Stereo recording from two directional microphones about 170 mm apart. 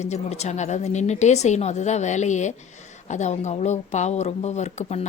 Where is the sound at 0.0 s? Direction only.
40° left (ahead or behind).